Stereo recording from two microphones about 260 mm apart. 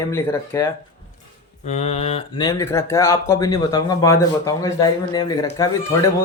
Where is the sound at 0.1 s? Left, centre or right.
Centre.